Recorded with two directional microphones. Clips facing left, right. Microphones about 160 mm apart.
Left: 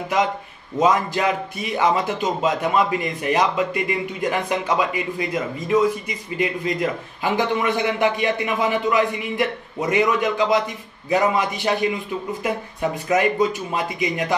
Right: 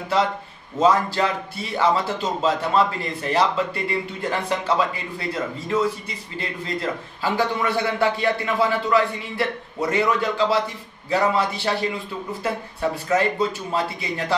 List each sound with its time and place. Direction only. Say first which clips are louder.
0.7 s a man's voice: even; 15° left (ahead or behind)
13.1 s a man's voice: left 3 dB; 15° left (ahead or behind)